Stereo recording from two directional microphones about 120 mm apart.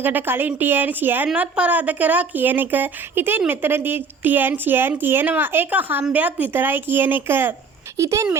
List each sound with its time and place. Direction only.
0.0 s speech: 15° right (ahead or behind)